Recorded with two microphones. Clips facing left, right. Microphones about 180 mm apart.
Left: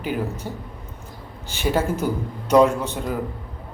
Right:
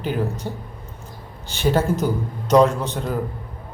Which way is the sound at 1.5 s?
10° left (ahead or behind).